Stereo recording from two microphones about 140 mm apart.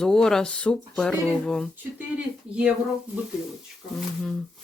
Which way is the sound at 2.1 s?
10° right (ahead or behind).